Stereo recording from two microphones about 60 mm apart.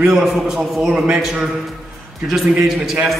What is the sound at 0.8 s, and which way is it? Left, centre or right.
Speech, right.